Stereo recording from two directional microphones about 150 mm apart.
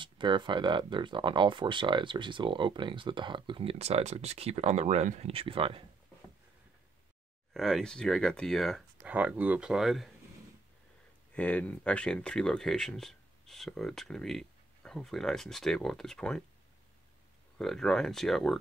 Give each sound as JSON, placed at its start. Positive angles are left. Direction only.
{"t": 0.0, "sound": "speech", "side_deg": -30}
{"t": 7.5, "sound": "speech", "side_deg": 0}
{"t": 9.0, "sound": "speech", "side_deg": -10}
{"t": 11.3, "sound": "speech", "side_deg": 10}
{"t": 17.6, "sound": "speech", "side_deg": 5}